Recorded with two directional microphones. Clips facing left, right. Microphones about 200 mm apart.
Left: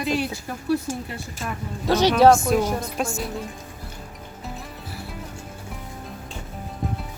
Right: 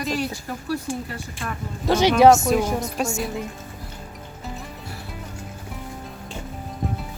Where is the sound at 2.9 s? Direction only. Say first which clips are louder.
Right 2 dB; centre (ahead or behind).